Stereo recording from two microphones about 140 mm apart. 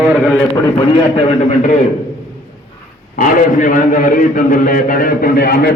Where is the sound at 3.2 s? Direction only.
70° left (ahead or behind); by 5.6 s 90° left.